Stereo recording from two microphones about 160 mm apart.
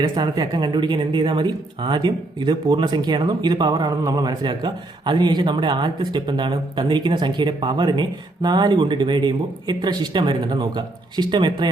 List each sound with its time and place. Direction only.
0.1 s speech: 25° right (ahead or behind)